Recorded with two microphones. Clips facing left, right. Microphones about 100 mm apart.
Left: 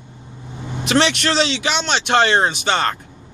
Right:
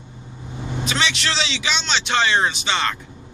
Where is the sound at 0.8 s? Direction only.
60° left (ahead or behind).